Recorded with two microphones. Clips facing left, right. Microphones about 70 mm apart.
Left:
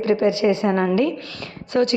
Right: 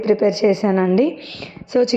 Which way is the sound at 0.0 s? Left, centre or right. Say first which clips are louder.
Right 3 dB; right.